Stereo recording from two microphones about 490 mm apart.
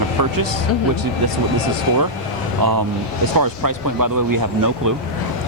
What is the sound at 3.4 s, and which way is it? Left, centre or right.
Speech, right.